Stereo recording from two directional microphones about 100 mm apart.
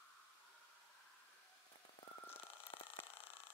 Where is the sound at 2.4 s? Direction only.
70° left (ahead or behind).